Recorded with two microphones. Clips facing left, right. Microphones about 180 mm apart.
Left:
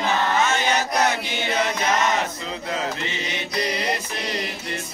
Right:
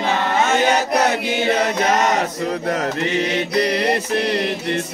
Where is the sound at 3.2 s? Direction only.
60° right (ahead or behind).